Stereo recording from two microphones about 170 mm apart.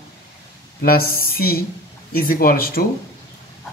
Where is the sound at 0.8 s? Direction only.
60° left (ahead or behind).